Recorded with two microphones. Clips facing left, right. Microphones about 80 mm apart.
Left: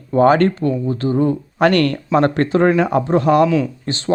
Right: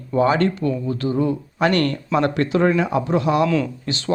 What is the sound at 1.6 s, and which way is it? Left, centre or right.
Speech, left.